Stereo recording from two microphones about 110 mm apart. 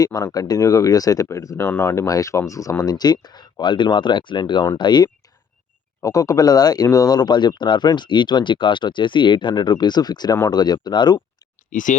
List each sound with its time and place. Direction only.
0.0 s speech: 30° left (ahead or behind)
2.0 s speech: 30° left (ahead or behind)